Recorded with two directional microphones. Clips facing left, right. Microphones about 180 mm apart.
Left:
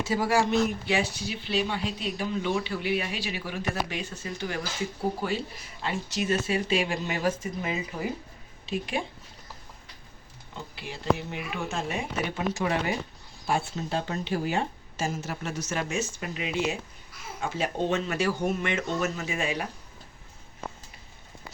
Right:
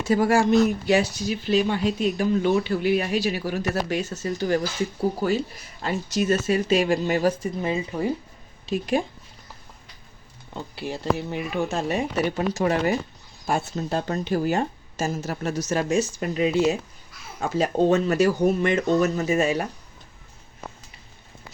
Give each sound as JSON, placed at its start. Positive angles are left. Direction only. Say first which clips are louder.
{"t": 0.0, "sound": "a woman's voice", "louder": "right 5 dB", "side_deg": -50}
{"t": 8.6, "sound": "speech", "louder": "right 7 dB", "side_deg": -40}
{"t": 10.5, "sound": "a woman's voice", "louder": "right 8 dB", "side_deg": -40}